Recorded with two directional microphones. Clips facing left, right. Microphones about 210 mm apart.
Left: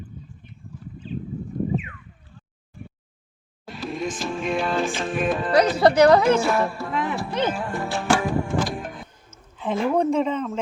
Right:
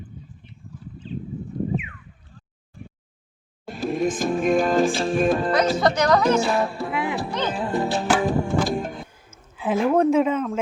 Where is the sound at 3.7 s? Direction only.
50° right (ahead or behind).